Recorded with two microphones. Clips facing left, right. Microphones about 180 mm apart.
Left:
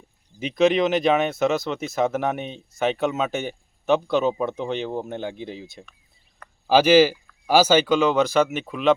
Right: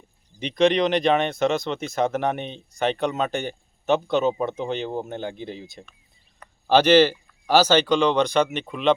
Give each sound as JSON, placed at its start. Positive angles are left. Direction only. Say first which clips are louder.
{"t": 0.3, "sound": "speech", "louder": "left 1 dB", "side_deg": 5}